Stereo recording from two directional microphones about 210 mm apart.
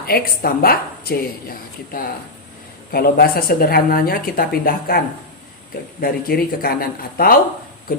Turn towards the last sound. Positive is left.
turn(degrees=45)  # may be behind; listen again after turning